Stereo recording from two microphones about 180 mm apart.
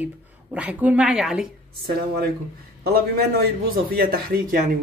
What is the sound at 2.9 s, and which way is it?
A man's voice, 55° right (ahead or behind).